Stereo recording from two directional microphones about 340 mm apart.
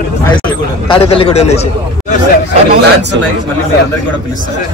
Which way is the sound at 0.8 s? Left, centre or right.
Centre.